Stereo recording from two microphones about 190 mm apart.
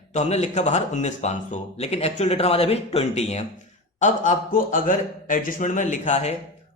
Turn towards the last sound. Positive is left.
turn(degrees=35)  # may be behind; listen again after turning